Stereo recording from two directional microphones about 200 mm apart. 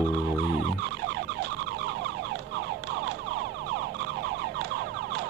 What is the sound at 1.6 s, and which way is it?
Emergency vehicle, 65° right (ahead or behind).